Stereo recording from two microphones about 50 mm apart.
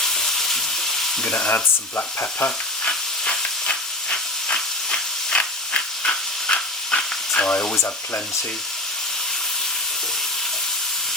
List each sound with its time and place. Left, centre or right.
0.0 s frying: centre
1.2 s sizzle: left
1.5 s sizzle: left
2.8 s steam: left